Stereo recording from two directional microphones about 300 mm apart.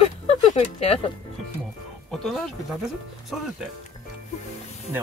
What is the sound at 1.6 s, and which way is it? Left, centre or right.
Speech, centre.